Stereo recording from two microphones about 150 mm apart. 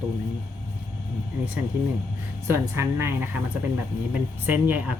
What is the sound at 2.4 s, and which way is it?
Speech, 15° right (ahead or behind).